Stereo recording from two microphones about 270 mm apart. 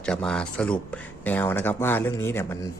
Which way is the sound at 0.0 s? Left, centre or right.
Centre.